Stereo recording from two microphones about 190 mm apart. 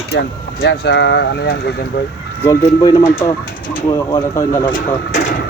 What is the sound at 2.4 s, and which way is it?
Speech, 20° left (ahead or behind).